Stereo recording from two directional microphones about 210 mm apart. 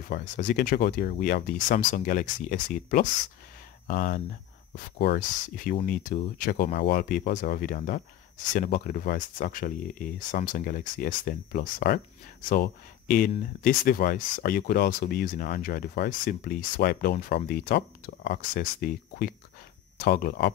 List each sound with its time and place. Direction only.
0.0 s speech: 40° left (ahead or behind)